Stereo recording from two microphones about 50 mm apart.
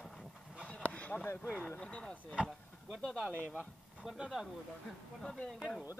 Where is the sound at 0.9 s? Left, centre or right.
Left.